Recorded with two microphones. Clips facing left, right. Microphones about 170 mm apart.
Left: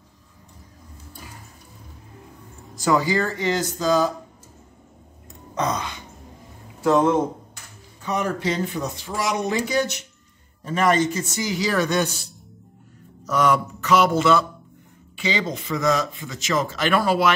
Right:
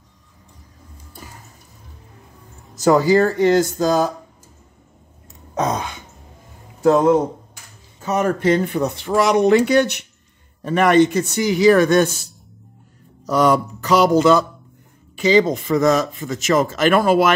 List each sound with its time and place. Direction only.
2.7 s speech: 40° right (ahead or behind)
5.5 s throat clearing: 50° right (ahead or behind)
8.0 s speech: 45° right (ahead or behind)
13.3 s speech: 35° right (ahead or behind)